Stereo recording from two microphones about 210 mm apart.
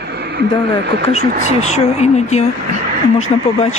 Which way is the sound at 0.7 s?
55° right (ahead or behind).